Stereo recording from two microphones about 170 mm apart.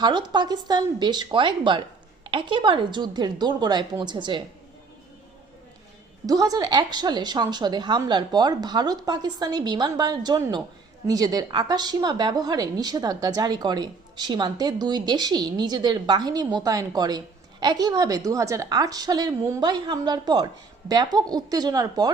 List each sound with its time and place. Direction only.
0.0 s speech: 25° right (ahead or behind)
6.2 s speech: 20° right (ahead or behind)